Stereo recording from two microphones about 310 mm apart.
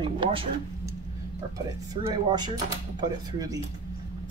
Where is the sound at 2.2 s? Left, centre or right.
Centre.